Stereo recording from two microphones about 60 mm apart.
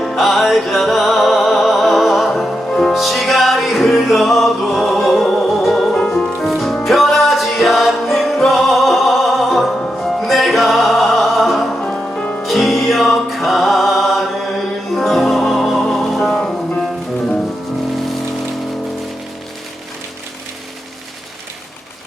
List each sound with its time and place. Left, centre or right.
0.0 s music: centre
11.8 s music: centre
12.4 s music: centre